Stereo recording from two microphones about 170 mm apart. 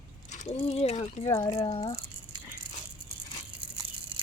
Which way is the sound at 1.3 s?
20° left (ahead or behind).